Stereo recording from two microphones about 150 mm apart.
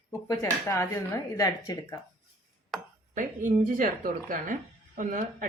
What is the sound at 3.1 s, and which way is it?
A woman's voice, 60° right (ahead or behind).